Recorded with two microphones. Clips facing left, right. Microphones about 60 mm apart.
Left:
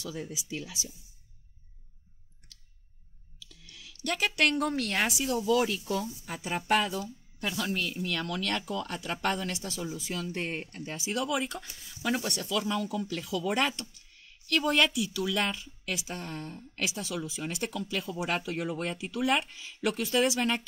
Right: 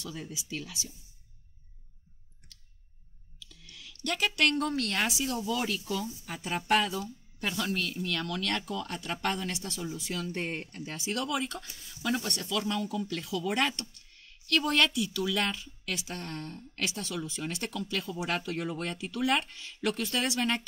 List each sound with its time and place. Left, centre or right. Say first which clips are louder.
0.1 s a woman's voice: left 2 dB; centre
3.8 s a woman's voice: even; centre
5.4 s speech: left 8 dB; centre
5.7 s a woman's voice: left 1 dB; left
6.2 s a woman's voice: even; centre
8.4 s a woman's voice: left 1 dB; left
10.0 s speech: right 1 dB; centre
11.4 s a woman's voice: left 1 dB; centre